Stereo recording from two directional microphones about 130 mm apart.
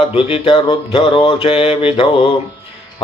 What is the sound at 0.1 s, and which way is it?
Speech, 45° left (ahead or behind).